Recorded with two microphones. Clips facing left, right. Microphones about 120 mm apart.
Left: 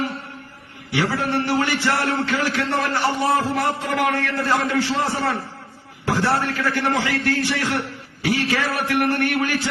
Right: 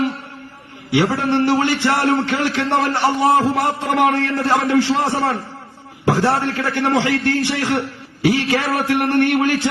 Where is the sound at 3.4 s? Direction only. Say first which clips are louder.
Right 4 dB; 25° right (ahead or behind).